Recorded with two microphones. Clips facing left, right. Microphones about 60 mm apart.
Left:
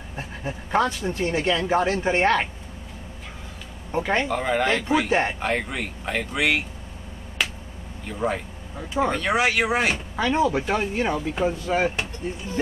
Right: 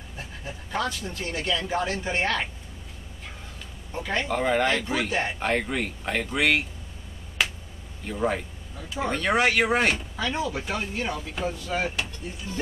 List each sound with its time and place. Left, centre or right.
0.1 s speech: left
3.9 s speech: left
4.3 s speech: centre
7.4 s finger snapping: centre
8.1 s speech: centre
8.7 s speech: left
9.1 s speech: centre
10.1 s speech: left